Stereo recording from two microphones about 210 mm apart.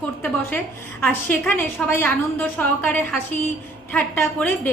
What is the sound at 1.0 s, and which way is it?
A woman's voice, 10° left (ahead or behind).